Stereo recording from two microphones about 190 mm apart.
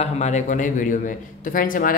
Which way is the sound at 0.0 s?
35° left (ahead or behind).